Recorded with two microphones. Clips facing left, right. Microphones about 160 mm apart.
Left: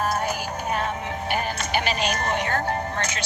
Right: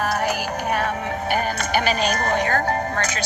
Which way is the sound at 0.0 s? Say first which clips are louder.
Right 3 dB; 75° right (ahead or behind).